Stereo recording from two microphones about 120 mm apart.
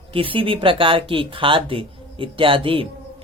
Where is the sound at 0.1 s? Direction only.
50° right (ahead or behind).